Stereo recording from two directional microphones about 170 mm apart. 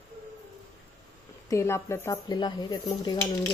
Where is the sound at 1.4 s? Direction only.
15° left (ahead or behind).